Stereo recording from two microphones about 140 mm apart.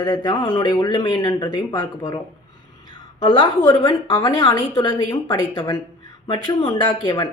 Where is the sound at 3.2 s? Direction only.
35° left (ahead or behind).